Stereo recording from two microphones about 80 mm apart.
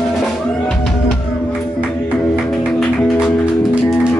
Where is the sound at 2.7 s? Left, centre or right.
Centre.